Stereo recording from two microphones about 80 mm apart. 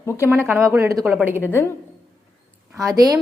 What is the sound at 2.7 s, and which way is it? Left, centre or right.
Speech, right.